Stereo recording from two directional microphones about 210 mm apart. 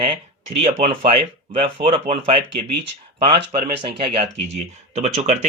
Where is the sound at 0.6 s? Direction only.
35° right (ahead or behind).